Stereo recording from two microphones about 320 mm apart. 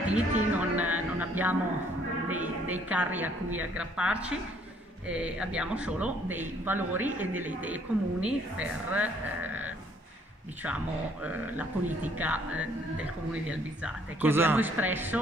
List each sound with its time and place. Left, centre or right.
0.1 s music: centre
2.2 s a man's voice: centre
12.0 s a man's voice: centre